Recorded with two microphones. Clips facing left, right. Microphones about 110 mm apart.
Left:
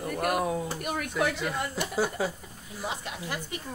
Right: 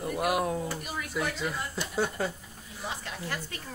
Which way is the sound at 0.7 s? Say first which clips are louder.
Left 5 dB; 55° left (ahead or behind).